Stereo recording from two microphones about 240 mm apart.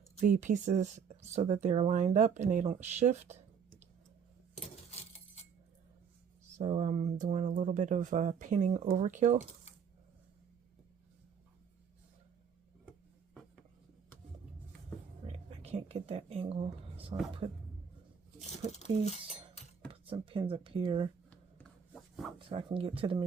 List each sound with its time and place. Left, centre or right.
0.2 s speech: right
4.5 s keys jangling: left
6.6 s speech: right
15.3 s a sound: right
17.1 s speech: right
18.3 s a sound: left
19.9 s speech: right
21.2 s rub: centre
22.4 s speech: right